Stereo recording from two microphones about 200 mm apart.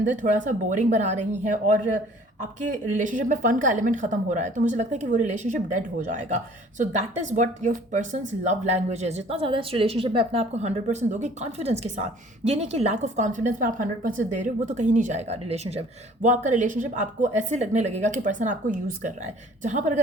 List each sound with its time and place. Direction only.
0.0 s speech: 40° right (ahead or behind)